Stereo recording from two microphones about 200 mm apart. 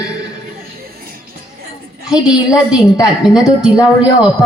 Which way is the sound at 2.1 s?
5° right (ahead or behind).